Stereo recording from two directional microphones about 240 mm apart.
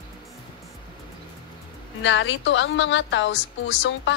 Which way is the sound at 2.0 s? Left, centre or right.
Left.